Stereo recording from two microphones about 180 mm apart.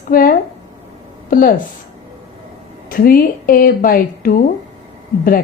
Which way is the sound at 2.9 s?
55° left (ahead or behind).